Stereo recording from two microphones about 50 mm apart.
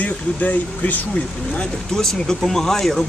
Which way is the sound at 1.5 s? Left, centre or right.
Centre.